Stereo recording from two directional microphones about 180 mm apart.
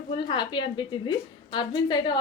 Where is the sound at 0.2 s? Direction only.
25° left (ahead or behind).